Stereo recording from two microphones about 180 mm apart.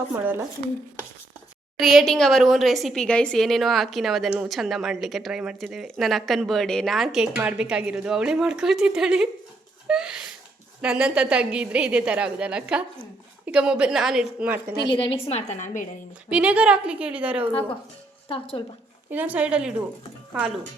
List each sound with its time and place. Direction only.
1.8 s a woman's voice: centre (ahead or behind)
9.8 s a sound: 5° right (ahead or behind)
10.8 s a woman's voice: 5° right (ahead or behind)
14.8 s a woman's voice: 30° left (ahead or behind); by 15.9 s 45° left (ahead or behind)
16.3 s a woman's voice: 5° right (ahead or behind)
18.3 s speech: 30° left (ahead or behind)
19.1 s a woman's voice: 10° right (ahead or behind)